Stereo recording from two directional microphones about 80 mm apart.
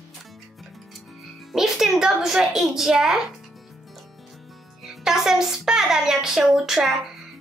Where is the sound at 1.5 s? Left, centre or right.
Centre.